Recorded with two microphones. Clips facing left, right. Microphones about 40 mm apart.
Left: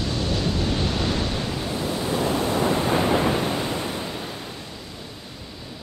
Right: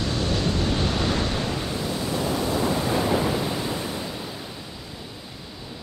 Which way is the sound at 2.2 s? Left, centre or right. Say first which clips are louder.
Left 2 dB; left.